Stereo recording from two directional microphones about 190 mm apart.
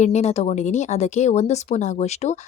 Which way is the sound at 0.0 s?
35° left (ahead or behind).